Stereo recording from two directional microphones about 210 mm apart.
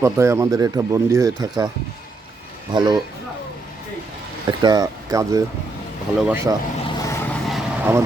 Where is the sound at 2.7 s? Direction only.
20° right (ahead or behind).